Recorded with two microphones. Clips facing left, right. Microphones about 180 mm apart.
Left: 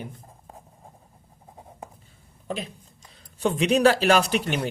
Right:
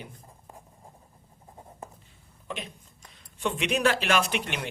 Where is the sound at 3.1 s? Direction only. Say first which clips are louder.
Left 5 dB; 35° left (ahead or behind).